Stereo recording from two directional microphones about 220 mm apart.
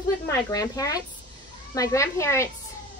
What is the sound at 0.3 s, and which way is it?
A woman's voice, 15° left (ahead or behind).